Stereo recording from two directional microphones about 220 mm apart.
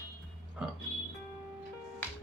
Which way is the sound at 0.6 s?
5° right (ahead or behind).